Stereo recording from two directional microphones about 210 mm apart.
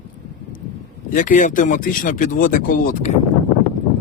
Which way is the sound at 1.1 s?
40° left (ahead or behind).